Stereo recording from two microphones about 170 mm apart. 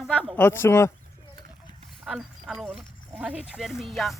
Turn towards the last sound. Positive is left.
turn(degrees=0)  # may be behind; listen again after turning